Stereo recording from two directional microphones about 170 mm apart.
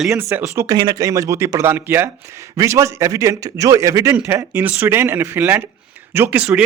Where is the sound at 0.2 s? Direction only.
15° right (ahead or behind).